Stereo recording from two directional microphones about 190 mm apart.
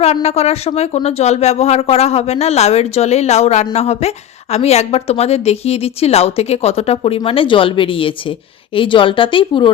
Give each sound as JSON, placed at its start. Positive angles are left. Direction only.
{"t": 0.0, "sound": "a woman's voice", "side_deg": 35}